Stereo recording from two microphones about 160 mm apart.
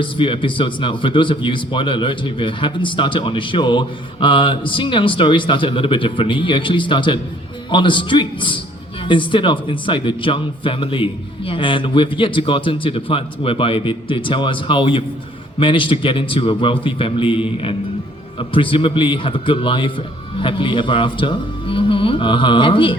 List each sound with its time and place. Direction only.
0.0 s a man's voice: 30° left (ahead or behind)